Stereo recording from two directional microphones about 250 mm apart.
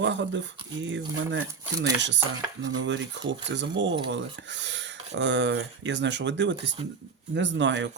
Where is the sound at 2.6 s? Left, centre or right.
Right.